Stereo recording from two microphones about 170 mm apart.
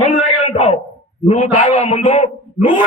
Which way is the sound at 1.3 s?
40° left (ahead or behind).